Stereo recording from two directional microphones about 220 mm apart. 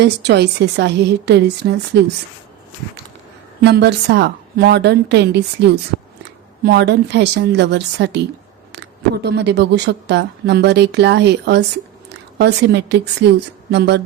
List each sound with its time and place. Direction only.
0.0 s a woman's voice: 50° right (ahead or behind)
3.6 s a woman's voice: 50° right (ahead or behind)
6.7 s a woman's voice: 50° right (ahead or behind)